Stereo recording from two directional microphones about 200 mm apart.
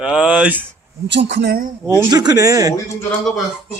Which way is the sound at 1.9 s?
20° right (ahead or behind).